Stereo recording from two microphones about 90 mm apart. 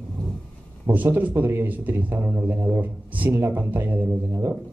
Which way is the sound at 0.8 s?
20° right (ahead or behind).